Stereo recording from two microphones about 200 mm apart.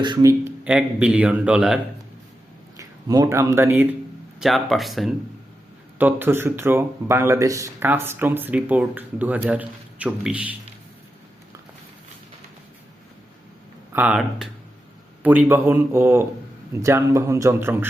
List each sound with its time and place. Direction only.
0.0 s speech: 20° right (ahead or behind)
0.6 s a man's voice: 5° right (ahead or behind)
2.7 s a man's voice: 15° right (ahead or behind)
4.4 s a man's voice: centre (ahead or behind)
13.9 s a man's voice: 5° right (ahead or behind)